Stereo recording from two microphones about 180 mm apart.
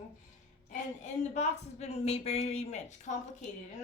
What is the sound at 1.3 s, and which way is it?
Speech, 40° left (ahead or behind).